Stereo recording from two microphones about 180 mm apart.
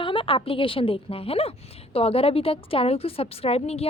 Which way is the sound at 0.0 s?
30° left (ahead or behind).